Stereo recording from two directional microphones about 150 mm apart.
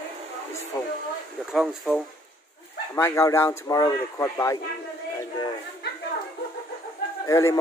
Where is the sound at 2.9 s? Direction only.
20° left (ahead or behind).